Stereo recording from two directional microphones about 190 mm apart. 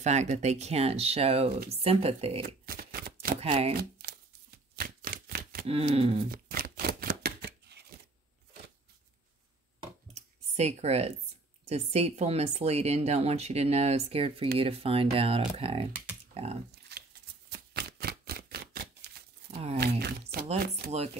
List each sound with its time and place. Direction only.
0.0 s speech: 35° right (ahead or behind)
2.4 s shuffling cards: 50° right (ahead or behind)
3.3 s speech: 30° right (ahead or behind)
3.7 s a sound: 55° right (ahead or behind)
5.7 s speech: 30° right (ahead or behind)
6.3 s a sound: 55° right (ahead or behind)
10.1 s computer keyboard: 35° right (ahead or behind)
11.6 s speech: 35° right (ahead or behind)
16.9 s shuffling cards: 60° right (ahead or behind)
17.5 s typewriter: 55° right (ahead or behind)
19.5 s speech: 35° right (ahead or behind)
19.8 s speech: 60° right (ahead or behind)
20.9 s speech: 35° right (ahead or behind)